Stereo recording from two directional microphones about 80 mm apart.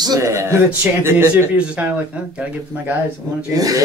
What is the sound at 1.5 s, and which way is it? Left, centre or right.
Speech, centre.